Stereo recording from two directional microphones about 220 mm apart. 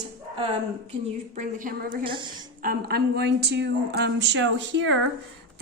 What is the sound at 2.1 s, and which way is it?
Speech, 20° right (ahead or behind).